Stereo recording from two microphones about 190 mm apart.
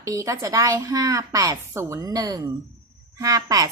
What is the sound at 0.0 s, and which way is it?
A woman's voice, 15° right (ahead or behind).